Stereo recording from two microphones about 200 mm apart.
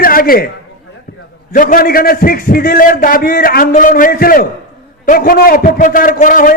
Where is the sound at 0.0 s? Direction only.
45° left (ahead or behind).